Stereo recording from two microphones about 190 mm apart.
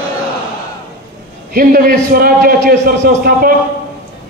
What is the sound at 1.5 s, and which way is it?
A man's voice, 50° right (ahead or behind).